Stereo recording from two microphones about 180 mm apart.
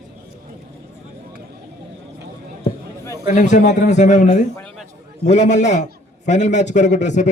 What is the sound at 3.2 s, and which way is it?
A man's voice, 45° left (ahead or behind).